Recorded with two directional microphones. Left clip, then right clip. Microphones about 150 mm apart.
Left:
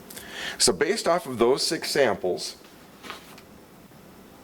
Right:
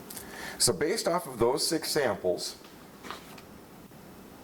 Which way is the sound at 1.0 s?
20° right (ahead or behind).